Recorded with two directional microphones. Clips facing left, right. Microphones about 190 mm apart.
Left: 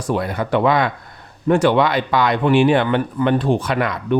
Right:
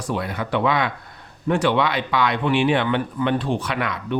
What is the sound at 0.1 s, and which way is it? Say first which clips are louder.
Speech: left 5 dB; 45° left (ahead or behind).